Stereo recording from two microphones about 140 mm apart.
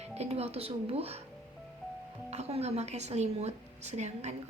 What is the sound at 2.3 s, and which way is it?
A woman's voice, 50° right (ahead or behind).